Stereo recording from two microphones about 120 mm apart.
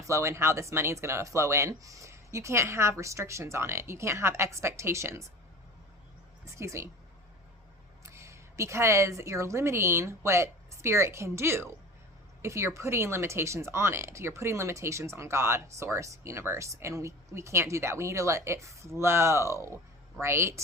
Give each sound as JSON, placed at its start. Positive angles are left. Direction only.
{"t": 0.1, "sound": "speech", "side_deg": -25}
{"t": 6.4, "sound": "a woman's voice", "side_deg": -25}
{"t": 8.0, "sound": "a woman's voice", "side_deg": -25}